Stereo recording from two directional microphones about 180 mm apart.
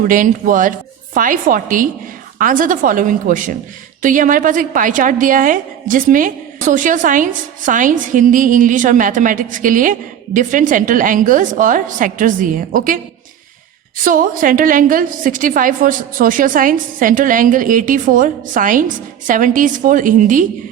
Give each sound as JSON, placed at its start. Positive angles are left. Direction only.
{"t": 0.1, "sound": "a woman's voice", "side_deg": -45}
{"t": 14.0, "sound": "a woman's voice", "side_deg": -50}